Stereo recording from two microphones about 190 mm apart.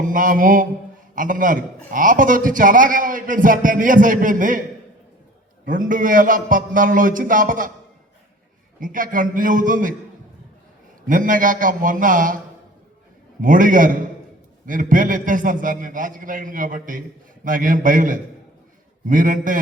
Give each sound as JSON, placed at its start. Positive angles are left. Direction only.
{"t": 0.0, "sound": "a man's voice", "side_deg": -45}
{"t": 5.6, "sound": "a man's voice", "side_deg": -45}
{"t": 8.8, "sound": "a man's voice", "side_deg": -45}
{"t": 11.0, "sound": "a man's voice", "side_deg": -45}
{"t": 13.4, "sound": "a man's voice", "side_deg": -45}